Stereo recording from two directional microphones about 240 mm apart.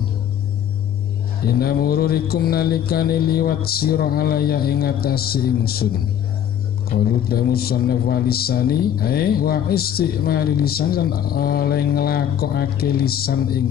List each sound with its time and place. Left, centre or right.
1.4 s a man's voice: left
6.9 s a man's voice: left